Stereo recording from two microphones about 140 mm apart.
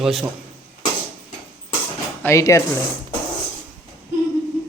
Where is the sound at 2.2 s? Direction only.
20° left (ahead or behind).